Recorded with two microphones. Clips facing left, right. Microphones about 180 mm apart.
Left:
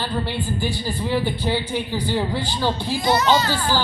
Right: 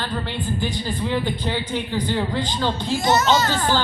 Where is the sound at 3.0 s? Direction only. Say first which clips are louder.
Even; 45° right (ahead or behind).